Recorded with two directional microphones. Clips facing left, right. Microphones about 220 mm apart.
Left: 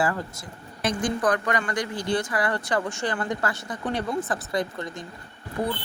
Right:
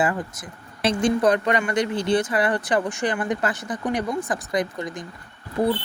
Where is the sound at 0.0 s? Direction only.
20° right (ahead or behind).